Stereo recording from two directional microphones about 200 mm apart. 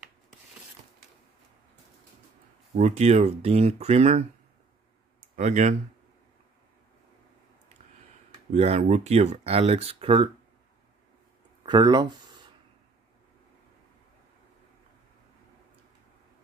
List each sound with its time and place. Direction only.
2.7 s speech: 35° right (ahead or behind)
5.3 s speech: 35° right (ahead or behind)
8.5 s speech: 30° right (ahead or behind)
11.6 s speech: 20° right (ahead or behind)